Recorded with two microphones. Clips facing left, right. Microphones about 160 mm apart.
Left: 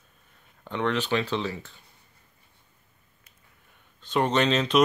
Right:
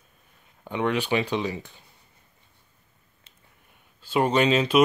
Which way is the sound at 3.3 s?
30° right (ahead or behind).